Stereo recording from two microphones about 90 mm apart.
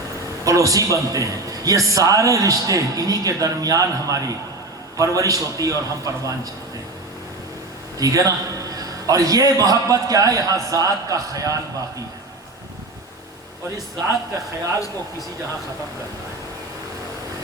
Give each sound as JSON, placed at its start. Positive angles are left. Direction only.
{"t": 0.4, "sound": "a man's voice", "side_deg": -40}
{"t": 7.9, "sound": "a man's voice", "side_deg": -40}